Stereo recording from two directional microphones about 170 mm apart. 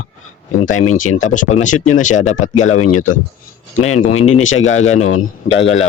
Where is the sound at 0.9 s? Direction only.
45° left (ahead or behind).